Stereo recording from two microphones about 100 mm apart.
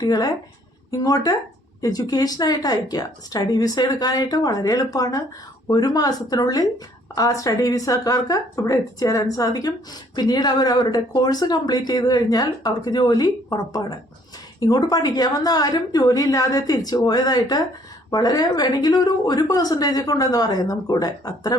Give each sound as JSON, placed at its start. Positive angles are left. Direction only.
{"t": 0.0, "sound": "speech", "side_deg": 40}